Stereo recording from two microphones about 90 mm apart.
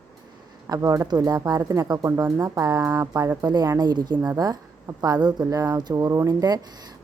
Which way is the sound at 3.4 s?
50° right (ahead or behind).